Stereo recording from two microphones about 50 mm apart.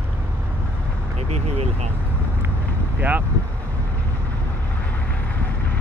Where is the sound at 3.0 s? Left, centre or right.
Right.